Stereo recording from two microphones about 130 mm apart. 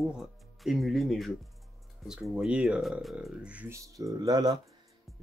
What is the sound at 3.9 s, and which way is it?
Speech, 30° right (ahead or behind).